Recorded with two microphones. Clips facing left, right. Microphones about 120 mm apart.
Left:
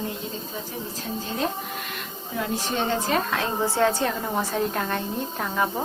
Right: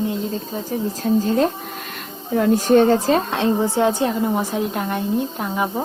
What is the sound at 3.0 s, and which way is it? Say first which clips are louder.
Speech: right 6 dB; 35° right (ahead or behind).